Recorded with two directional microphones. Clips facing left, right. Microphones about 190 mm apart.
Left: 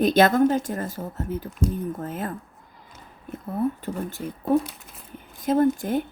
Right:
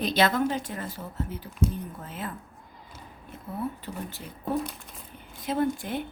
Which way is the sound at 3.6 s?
50° left (ahead or behind).